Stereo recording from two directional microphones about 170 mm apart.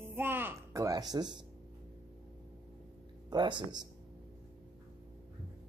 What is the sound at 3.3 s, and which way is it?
Speech, 25° right (ahead or behind).